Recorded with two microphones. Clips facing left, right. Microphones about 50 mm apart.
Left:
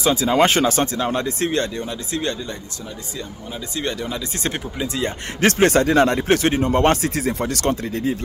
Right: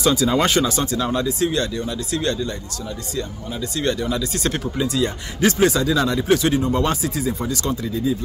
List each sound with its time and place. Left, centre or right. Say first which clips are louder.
0.0 s speech: left 1 dB; left
0.5 s speech: left 1 dB; left
3.7 s speech: right 3 dB; centre
5.4 s speech: left 2 dB; left